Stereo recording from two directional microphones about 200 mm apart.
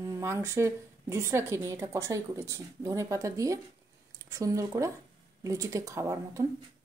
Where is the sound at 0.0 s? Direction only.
15° right (ahead or behind).